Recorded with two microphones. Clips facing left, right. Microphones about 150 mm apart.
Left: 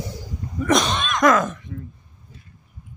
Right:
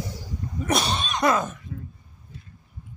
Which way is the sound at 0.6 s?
90° left.